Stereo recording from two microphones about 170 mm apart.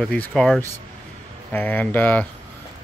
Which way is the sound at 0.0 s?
5° left (ahead or behind).